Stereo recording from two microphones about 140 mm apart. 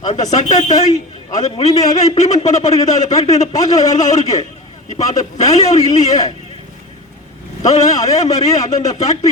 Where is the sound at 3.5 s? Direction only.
25° left (ahead or behind).